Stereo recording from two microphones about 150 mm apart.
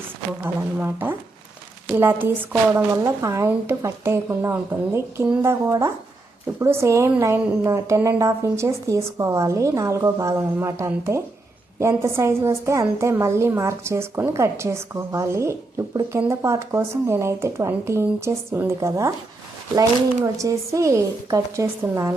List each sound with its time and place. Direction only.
0.4 s a woman's voice: 15° right (ahead or behind)
20.2 s a woman's voice: 20° right (ahead or behind)